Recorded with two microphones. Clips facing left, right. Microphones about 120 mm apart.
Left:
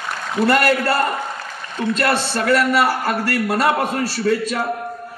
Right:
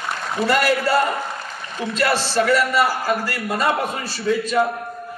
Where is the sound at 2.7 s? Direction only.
70° left (ahead or behind).